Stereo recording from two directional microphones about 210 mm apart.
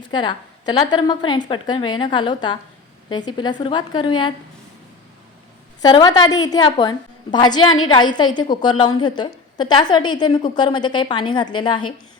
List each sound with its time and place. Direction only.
0.1 s a woman's voice: 20° left (ahead or behind)
5.8 s a woman's voice: 20° left (ahead or behind)